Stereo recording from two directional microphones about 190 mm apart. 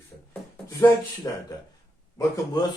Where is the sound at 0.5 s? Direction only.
15° left (ahead or behind).